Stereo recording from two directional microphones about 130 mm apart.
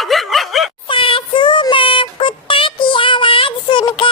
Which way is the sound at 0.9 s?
40° left (ahead or behind).